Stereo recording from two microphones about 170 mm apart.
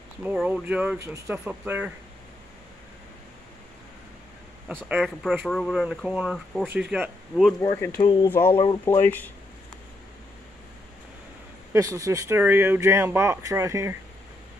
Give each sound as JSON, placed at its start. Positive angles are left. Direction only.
{"t": 0.2, "sound": "speech", "side_deg": -10}
{"t": 4.6, "sound": "speech", "side_deg": -10}
{"t": 6.7, "sound": "speech", "side_deg": -10}
{"t": 7.6, "sound": "speech", "side_deg": 15}
{"t": 8.0, "sound": "speech", "side_deg": 25}
{"t": 8.3, "sound": "speech", "side_deg": 10}
{"t": 11.7, "sound": "speech", "side_deg": -20}